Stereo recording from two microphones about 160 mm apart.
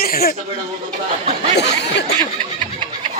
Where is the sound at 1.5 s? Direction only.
90° left.